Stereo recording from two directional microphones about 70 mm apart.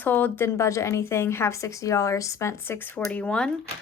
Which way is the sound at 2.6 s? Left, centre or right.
Left.